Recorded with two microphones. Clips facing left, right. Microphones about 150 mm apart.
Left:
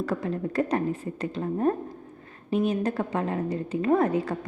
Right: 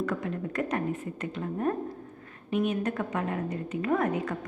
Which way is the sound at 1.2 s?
30° left (ahead or behind).